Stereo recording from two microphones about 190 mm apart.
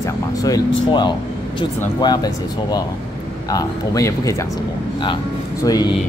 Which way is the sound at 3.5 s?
20° left (ahead or behind).